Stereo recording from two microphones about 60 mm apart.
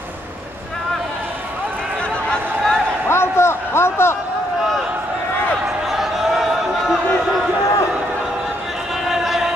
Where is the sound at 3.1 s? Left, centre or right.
Left.